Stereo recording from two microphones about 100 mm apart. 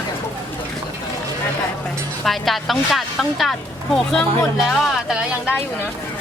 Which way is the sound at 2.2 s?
Centre (ahead or behind).